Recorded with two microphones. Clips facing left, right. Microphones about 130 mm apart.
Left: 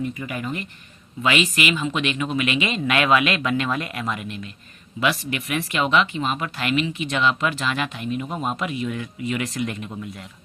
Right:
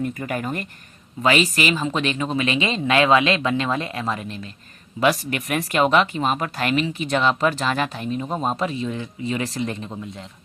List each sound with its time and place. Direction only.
0.0 s a man's voice: 45° right (ahead or behind); by 10.2 s 25° right (ahead or behind)